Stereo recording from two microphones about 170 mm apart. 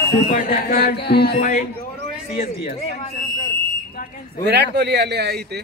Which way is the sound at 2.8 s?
40° left (ahead or behind).